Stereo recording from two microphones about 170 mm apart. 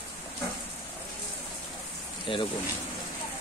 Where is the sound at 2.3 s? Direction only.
30° left (ahead or behind).